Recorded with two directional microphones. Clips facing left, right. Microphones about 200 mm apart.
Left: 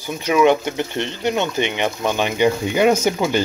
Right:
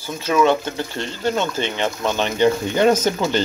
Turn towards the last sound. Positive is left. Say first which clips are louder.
# left 1 dB
turn(degrees=10)  # may be behind; listen again after turning